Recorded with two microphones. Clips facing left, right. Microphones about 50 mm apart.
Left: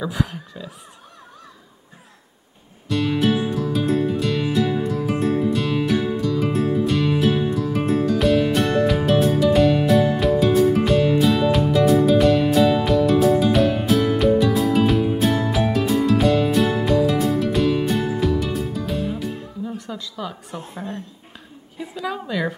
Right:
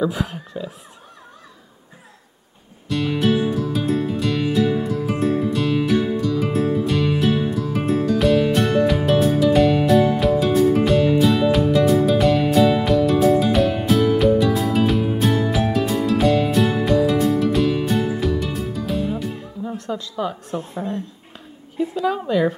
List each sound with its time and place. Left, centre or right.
0.1 s a woman's voice: right
2.9 s music: centre
19.6 s a woman's voice: centre
22.2 s speech: centre